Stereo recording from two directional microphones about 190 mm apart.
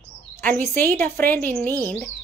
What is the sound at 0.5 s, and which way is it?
A woman's voice, 10° left (ahead or behind).